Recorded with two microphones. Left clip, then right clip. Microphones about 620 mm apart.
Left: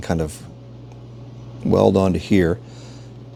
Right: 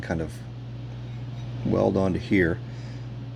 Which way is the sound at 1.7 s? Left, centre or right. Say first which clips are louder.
Left 8 dB; left.